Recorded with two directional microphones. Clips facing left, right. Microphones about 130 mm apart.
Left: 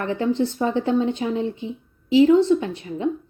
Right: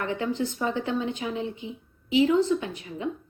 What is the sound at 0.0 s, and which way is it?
A woman's voice, 35° left (ahead or behind).